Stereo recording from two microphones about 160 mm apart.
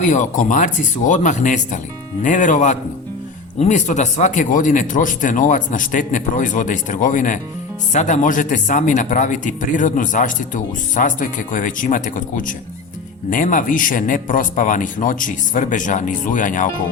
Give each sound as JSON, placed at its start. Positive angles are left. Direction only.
{"t": 0.0, "sound": "a man's voice", "side_deg": 50}